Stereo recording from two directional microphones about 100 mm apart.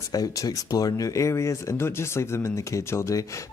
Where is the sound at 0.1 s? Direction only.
40° left (ahead or behind).